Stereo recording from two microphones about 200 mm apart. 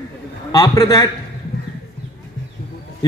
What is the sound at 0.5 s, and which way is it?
Speech, 20° left (ahead or behind).